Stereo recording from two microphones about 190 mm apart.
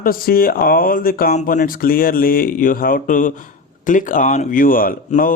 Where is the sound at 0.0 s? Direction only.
50° left (ahead or behind).